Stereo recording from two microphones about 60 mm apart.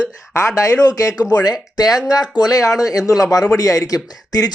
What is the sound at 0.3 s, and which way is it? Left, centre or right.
A man's voice, left.